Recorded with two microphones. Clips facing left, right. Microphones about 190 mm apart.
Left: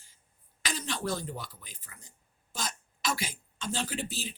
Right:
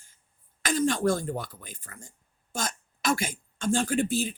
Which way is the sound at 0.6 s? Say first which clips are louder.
Right 10 dB; 50° right (ahead or behind).